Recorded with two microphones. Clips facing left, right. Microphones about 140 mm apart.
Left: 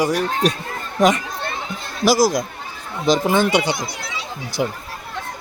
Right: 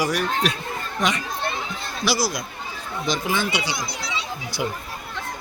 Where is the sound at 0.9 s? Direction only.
45° left (ahead or behind).